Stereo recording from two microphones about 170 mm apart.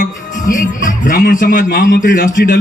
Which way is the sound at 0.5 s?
50° left (ahead or behind).